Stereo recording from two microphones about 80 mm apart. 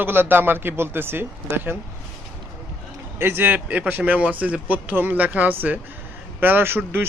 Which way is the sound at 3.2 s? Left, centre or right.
Right.